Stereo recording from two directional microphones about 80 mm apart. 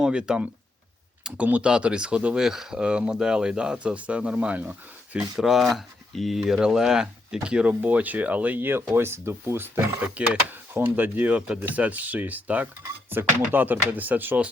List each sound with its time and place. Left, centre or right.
0.0 s speech: centre
1.5 s speech: centre
5.4 s speech: centre; by 14.3 s right